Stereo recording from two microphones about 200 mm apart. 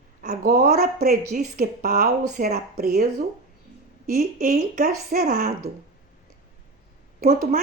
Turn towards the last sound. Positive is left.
turn(degrees=-45)  # may be behind; listen again after turning